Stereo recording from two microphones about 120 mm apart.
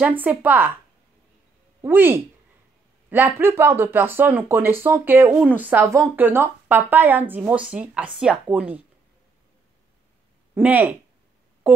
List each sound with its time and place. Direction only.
0.2 s speech: 15° right (ahead or behind)
1.8 s speech: 20° right (ahead or behind)
10.5 s speech: 15° right (ahead or behind)